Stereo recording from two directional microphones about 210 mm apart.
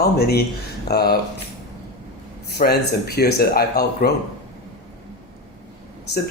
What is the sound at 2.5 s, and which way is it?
Speech, 50° left (ahead or behind).